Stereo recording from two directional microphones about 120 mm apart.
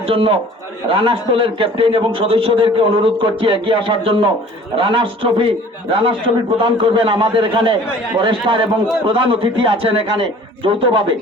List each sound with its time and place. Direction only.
0.1 s a man's voice: 50° right (ahead or behind)